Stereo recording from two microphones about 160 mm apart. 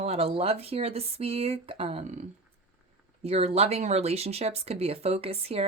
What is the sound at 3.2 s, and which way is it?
Speech, 40° right (ahead or behind).